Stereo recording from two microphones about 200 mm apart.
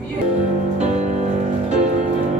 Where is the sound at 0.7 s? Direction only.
35° right (ahead or behind).